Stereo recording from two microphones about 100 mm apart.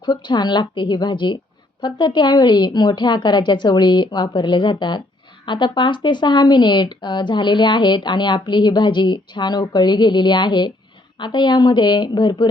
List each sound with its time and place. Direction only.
0.0 s speech: 50° left (ahead or behind)